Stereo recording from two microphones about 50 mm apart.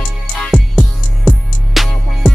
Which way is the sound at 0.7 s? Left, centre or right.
Centre.